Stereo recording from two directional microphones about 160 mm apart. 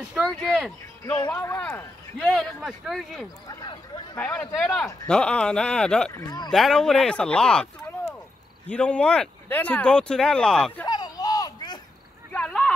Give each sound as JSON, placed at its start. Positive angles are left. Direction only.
{"t": 0.1, "sound": "speech", "side_deg": 5}
{"t": 1.3, "sound": "speech", "side_deg": 15}
{"t": 3.4, "sound": "speech", "side_deg": 25}
{"t": 4.2, "sound": "speech", "side_deg": 5}
{"t": 6.1, "sound": "speech", "side_deg": 25}
{"t": 6.5, "sound": "speech", "side_deg": 5}
{"t": 8.6, "sound": "speech", "side_deg": 5}
{"t": 10.9, "sound": "a sound", "side_deg": 25}
{"t": 12.3, "sound": "a sound", "side_deg": 5}